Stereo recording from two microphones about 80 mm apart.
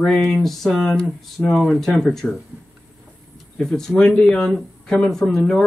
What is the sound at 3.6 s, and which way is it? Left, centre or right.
Speech, centre.